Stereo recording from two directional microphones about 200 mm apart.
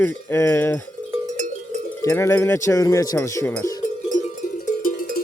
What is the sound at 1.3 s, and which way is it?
Cowbell, 40° right (ahead or behind).